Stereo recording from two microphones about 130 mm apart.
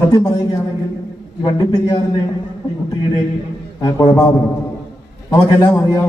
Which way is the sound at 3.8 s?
30° left (ahead or behind).